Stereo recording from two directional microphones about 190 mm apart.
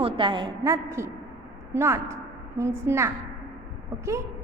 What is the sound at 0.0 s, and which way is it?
A woman's voice, 25° right (ahead or behind).